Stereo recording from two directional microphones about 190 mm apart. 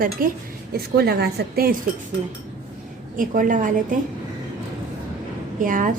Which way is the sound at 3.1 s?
45° right (ahead or behind).